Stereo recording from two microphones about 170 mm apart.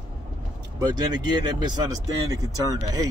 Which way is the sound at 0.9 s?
25° right (ahead or behind).